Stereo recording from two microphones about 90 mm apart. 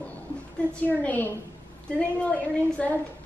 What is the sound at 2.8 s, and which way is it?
Speech, 15° left (ahead or behind).